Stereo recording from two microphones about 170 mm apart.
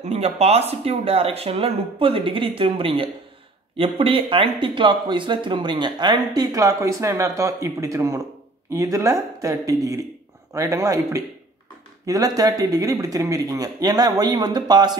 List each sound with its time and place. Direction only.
0.0 s speech: 40° right (ahead or behind)